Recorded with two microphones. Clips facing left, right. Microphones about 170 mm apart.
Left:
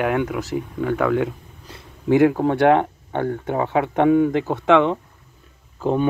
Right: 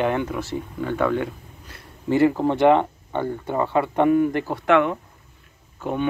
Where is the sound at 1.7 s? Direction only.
15° left (ahead or behind).